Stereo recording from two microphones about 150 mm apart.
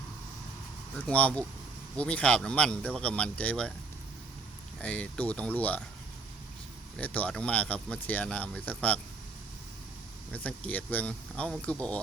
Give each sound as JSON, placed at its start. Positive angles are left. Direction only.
{"t": 0.9, "sound": "speech", "side_deg": 10}
{"t": 4.8, "sound": "speech", "side_deg": 10}
{"t": 7.0, "sound": "speech", "side_deg": 10}
{"t": 10.3, "sound": "speech", "side_deg": 10}